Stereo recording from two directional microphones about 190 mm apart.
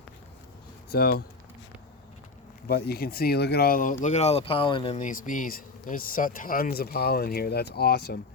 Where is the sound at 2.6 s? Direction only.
55° left (ahead or behind).